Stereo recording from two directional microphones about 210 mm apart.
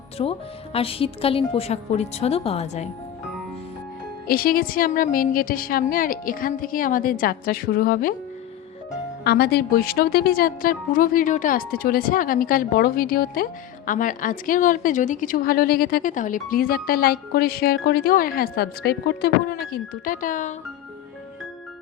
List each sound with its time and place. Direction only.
0.2 s a woman's voice: 25° left (ahead or behind)
4.3 s a woman's voice: 45° left (ahead or behind)
9.2 s a woman's voice: 50° left (ahead or behind)